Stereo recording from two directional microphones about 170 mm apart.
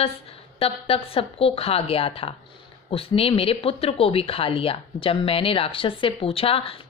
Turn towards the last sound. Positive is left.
turn(degrees=35)  # may be behind; listen again after turning